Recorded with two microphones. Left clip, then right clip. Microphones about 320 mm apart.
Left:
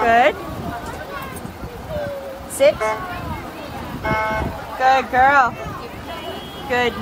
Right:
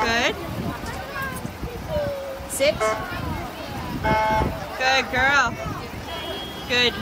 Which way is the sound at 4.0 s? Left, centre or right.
Right.